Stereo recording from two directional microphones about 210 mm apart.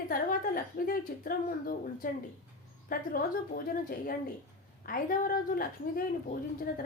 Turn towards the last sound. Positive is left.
turn(degrees=45)  # may be behind; listen again after turning